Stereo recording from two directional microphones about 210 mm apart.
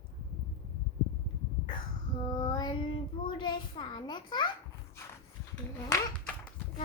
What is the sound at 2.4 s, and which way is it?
A child's voice, 20° left (ahead or behind).